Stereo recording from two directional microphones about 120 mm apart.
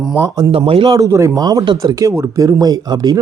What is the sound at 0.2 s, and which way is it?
Speech, 25° right (ahead or behind).